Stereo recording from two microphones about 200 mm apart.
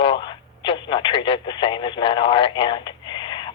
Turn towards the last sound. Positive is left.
turn(degrees=20)  # may be behind; listen again after turning